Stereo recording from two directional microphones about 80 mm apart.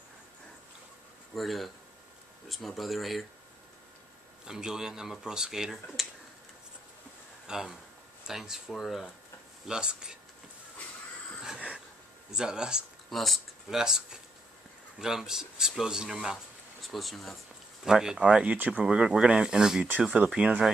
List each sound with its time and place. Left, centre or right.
1.3 s speech: centre
4.5 s speech: centre
7.4 s speech: centre
11.4 s a sound: centre
12.3 s speech: centre